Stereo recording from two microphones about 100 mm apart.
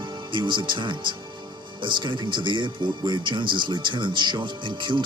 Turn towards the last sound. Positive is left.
turn(degrees=-55)  # may be behind; listen again after turning